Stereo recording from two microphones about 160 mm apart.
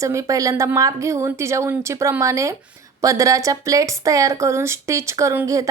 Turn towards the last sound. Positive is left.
turn(degrees=-20)  # may be behind; listen again after turning